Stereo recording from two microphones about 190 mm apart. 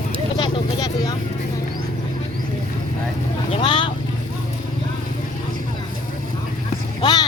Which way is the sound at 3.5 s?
25° left (ahead or behind).